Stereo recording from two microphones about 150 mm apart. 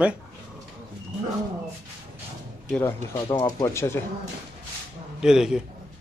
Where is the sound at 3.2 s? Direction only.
30° left (ahead or behind).